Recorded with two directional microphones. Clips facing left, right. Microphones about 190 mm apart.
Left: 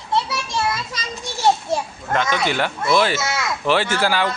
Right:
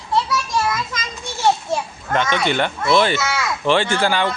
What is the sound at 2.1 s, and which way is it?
Speech, 5° left (ahead or behind).